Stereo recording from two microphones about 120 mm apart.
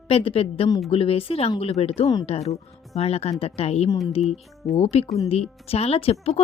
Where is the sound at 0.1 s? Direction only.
50° left (ahead or behind).